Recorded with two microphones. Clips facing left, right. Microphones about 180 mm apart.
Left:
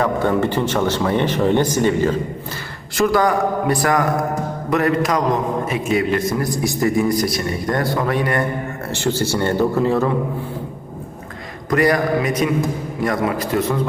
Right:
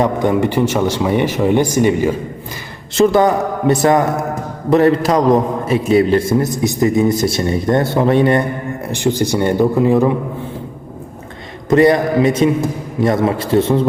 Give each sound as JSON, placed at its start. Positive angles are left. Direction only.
{"t": 0.0, "sound": "speech", "side_deg": -15}
{"t": 2.9, "sound": "a man's voice", "side_deg": -25}
{"t": 11.7, "sound": "a man's voice", "side_deg": -25}